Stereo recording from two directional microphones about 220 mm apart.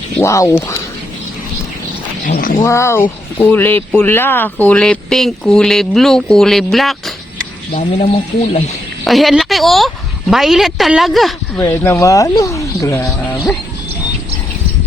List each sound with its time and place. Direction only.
0.2 s speech: 15° left (ahead or behind)
2.2 s speech: 40° left (ahead or behind)
2.6 s speech: 15° left (ahead or behind)
7.8 s speech: 30° left (ahead or behind)
9.0 s speech: centre (ahead or behind)
11.6 s speech: 10° left (ahead or behind)